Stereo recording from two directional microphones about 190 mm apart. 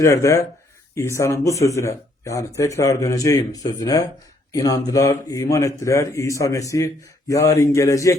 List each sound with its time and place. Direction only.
0.0 s a man's voice: 15° left (ahead or behind)